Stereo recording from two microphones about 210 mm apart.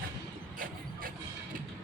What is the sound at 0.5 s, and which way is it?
Music, 40° right (ahead or behind).